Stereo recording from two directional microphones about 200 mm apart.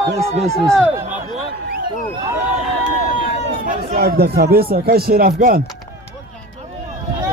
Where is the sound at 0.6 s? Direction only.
Centre (ahead or behind).